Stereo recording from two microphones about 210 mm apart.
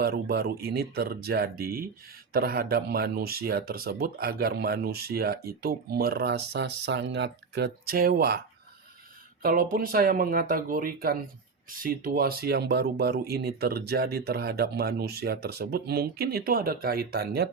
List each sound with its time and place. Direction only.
0.0 s speech: 50° right (ahead or behind)
9.4 s speech: 40° right (ahead or behind)